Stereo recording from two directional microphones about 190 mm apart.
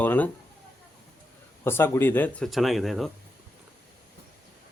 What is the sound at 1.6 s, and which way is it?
A man's voice, 10° left (ahead or behind).